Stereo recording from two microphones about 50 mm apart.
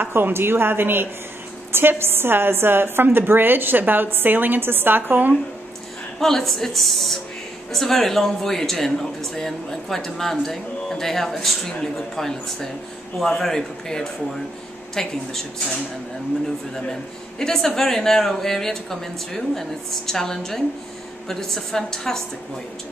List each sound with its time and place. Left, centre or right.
0.0 s a woman's voice: right
6.1 s a woman's voice: centre
17.4 s speech: centre